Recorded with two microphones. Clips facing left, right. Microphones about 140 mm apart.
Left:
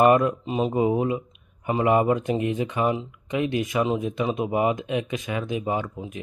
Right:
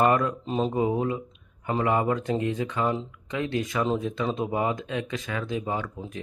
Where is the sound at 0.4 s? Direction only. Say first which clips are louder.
Left 2 dB; 10° left (ahead or behind).